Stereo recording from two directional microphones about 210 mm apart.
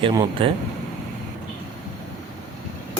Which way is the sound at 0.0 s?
20° right (ahead or behind).